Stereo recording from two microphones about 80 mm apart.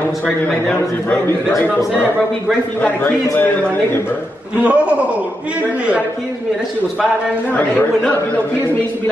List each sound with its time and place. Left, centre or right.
4.6 s a man's voice: centre
7.5 s speech: left